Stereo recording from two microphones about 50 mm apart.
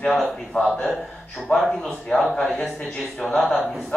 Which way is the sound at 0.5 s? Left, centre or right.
Centre.